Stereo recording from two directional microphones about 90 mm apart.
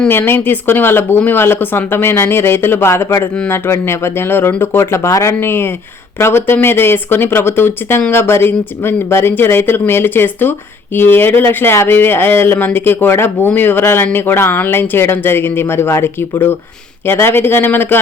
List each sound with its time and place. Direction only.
0.1 s speech: 25° left (ahead or behind)